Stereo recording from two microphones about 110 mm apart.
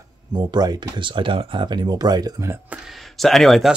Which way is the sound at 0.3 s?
40° right (ahead or behind).